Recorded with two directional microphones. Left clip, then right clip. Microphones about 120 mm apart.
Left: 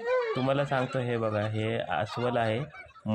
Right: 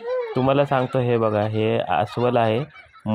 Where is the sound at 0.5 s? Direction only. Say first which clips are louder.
Right 9 dB; 45° right (ahead or behind).